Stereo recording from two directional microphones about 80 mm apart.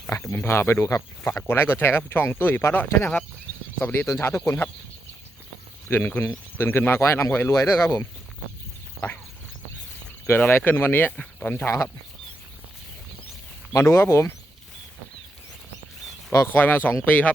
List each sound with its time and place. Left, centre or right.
0.3 s speech: left
1.3 s speech: left
5.9 s speech: left
10.2 s speech: left
13.7 s speech: left
16.5 s speech: left